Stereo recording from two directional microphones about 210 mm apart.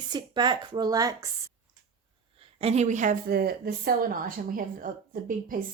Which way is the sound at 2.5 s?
30° right (ahead or behind).